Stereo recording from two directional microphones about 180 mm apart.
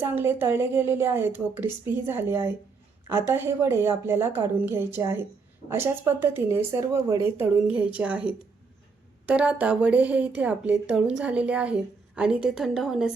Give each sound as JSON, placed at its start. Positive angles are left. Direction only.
{"t": 0.0, "sound": "a woman's voice", "side_deg": -10}